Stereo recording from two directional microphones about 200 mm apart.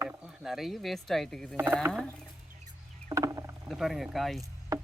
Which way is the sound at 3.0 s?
15° right (ahead or behind).